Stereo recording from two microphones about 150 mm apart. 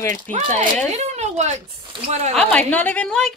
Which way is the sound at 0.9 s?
50° right (ahead or behind).